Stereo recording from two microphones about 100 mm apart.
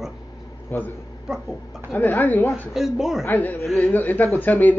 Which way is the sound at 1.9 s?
20° left (ahead or behind).